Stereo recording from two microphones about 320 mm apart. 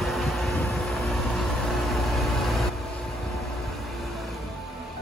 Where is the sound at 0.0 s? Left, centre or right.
Centre.